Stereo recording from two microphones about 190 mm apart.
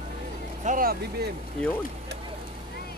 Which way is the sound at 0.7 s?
50° right (ahead or behind).